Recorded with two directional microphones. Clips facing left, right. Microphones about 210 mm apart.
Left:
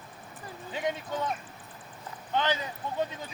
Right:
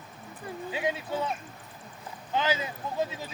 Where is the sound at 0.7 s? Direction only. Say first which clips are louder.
Right 1 dB; 10° right (ahead or behind).